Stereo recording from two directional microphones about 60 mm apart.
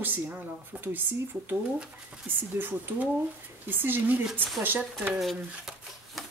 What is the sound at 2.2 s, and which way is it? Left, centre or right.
Speech, right.